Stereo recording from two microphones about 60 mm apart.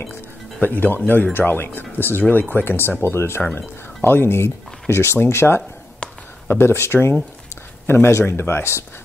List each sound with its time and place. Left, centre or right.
0.6 s speech: left
6.0 s a sound: centre
6.4 s speech: left